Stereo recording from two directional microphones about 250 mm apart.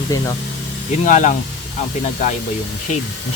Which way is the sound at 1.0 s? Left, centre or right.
Left.